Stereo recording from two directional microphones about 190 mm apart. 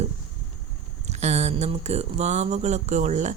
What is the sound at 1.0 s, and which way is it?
A woman's voice, 35° right (ahead or behind).